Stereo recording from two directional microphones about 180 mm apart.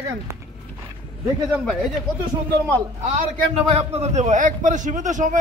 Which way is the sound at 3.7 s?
35° right (ahead or behind).